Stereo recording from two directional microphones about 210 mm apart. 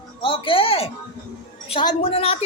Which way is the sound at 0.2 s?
25° left (ahead or behind).